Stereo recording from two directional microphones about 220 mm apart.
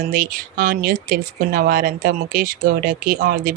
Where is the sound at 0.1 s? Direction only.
40° right (ahead or behind).